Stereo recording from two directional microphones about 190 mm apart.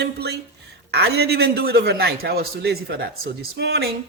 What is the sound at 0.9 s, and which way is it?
A man's voice, 55° right (ahead or behind).